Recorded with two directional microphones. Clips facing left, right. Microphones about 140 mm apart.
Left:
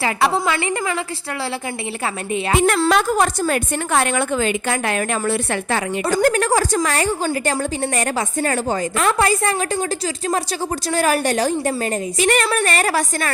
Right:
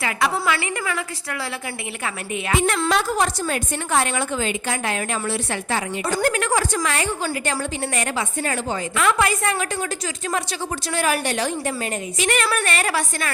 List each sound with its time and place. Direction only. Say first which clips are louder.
0.0 s a woman's voice: left 4 dB; 30° left (ahead or behind)
2.9 s a woman's voice: left 4 dB; 50° left (ahead or behind)
6.1 s a woman's voice: left 5 dB; 40° left (ahead or behind)
10.9 s a woman's voice: left 4 dB; 40° left (ahead or behind)